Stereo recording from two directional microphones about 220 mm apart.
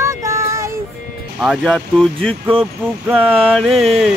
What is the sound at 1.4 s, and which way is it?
Speech, centre (ahead or behind).